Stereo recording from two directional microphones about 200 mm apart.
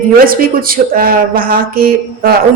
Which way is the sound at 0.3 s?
45° right (ahead or behind).